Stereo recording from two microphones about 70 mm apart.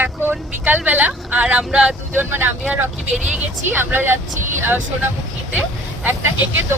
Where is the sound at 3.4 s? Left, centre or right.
Right.